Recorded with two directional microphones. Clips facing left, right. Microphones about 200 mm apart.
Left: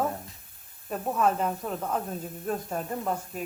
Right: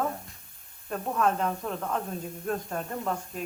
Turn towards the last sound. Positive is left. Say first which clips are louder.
# left 1 dB
turn(degrees=5)  # may be behind; listen again after turning